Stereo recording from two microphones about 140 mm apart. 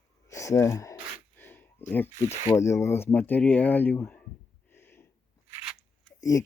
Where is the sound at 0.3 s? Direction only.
20° left (ahead or behind).